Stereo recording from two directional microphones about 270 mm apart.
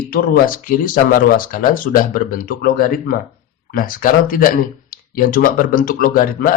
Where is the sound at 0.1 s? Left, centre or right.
Left.